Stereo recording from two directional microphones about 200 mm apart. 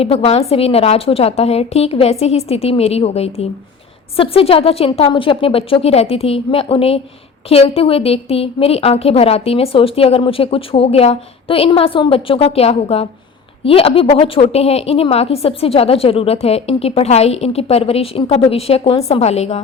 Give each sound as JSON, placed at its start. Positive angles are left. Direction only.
{"t": 0.0, "sound": "a woman's voice", "side_deg": 30}